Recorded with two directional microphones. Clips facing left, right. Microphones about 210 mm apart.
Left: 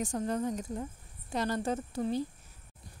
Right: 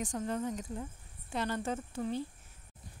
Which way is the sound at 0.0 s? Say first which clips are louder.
Left 3 dB; 40° left (ahead or behind).